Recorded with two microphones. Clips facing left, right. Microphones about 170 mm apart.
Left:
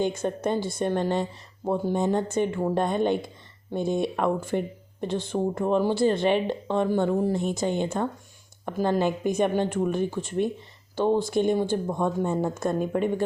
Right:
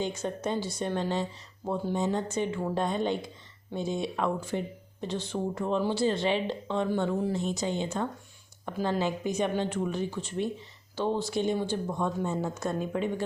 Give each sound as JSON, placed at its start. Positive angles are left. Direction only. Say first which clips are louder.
{"t": 0.0, "sound": "speech", "louder": "left 5 dB", "side_deg": 55}